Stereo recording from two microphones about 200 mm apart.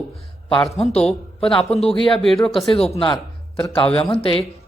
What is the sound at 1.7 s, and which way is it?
Speech, 30° left (ahead or behind).